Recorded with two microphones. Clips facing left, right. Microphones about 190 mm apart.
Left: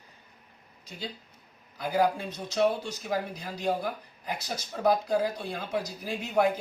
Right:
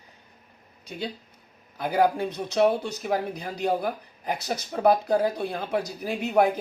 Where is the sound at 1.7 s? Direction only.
60° right (ahead or behind).